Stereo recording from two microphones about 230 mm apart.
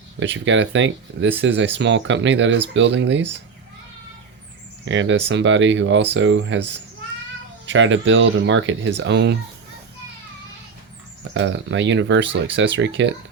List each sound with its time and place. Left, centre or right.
0.2 s speech: right
4.9 s speech: right
7.7 s speech: right
11.2 s speech: right